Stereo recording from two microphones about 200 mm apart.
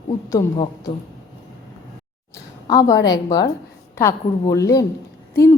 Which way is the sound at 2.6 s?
15° left (ahead or behind).